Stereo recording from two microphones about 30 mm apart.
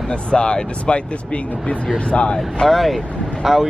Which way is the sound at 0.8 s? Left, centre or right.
Left.